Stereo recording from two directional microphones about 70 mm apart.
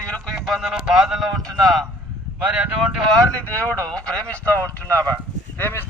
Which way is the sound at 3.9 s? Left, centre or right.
Centre.